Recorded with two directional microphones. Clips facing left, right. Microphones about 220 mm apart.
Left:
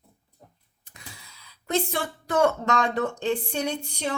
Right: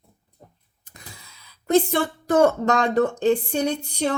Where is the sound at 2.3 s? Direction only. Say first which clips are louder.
Right 4 dB; 45° right (ahead or behind).